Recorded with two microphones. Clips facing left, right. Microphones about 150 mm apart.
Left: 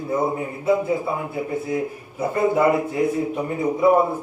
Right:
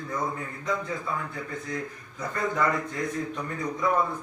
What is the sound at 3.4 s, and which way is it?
Speech, 25° left (ahead or behind).